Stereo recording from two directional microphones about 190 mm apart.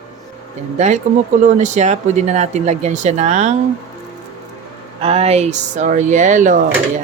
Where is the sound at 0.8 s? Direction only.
40° right (ahead or behind).